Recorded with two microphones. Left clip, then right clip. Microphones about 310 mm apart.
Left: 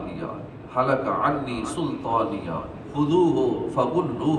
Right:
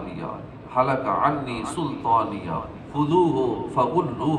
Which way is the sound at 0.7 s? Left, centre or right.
Right.